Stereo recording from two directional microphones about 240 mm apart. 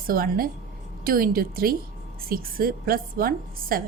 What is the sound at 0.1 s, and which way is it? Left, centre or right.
Speech, right.